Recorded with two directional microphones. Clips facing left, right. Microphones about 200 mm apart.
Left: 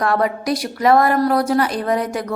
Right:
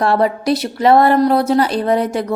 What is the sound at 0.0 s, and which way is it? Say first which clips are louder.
A woman's voice: right 4 dB; 30° right (ahead or behind).